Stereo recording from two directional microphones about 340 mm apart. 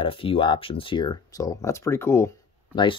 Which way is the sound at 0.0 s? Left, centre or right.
Centre.